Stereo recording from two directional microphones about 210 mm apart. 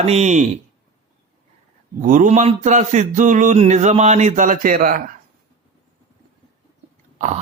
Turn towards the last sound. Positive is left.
turn(degrees=-35)  # may be behind; listen again after turning